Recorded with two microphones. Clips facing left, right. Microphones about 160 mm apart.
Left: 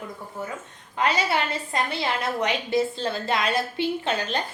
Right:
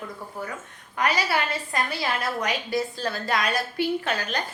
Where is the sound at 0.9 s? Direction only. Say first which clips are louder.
Left 1 dB; 25° left (ahead or behind).